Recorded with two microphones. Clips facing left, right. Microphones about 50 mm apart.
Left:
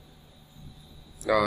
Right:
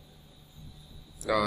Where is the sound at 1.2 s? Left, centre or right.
Centre.